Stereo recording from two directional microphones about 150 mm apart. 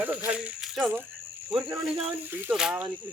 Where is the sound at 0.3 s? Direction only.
10° right (ahead or behind).